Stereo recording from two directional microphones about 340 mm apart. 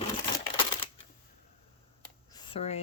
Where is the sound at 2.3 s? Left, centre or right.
Centre.